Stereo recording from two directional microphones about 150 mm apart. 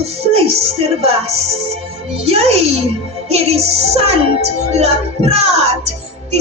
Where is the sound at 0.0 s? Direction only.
45° right (ahead or behind).